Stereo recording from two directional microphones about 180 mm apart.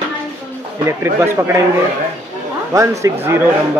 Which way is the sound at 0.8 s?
15° right (ahead or behind).